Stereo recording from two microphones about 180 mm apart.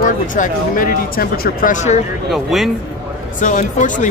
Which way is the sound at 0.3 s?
50° left (ahead or behind).